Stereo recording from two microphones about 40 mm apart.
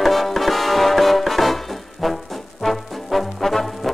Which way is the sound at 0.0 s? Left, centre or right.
Centre.